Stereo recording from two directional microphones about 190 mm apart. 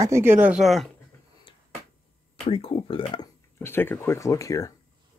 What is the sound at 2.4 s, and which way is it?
Speech, 30° left (ahead or behind).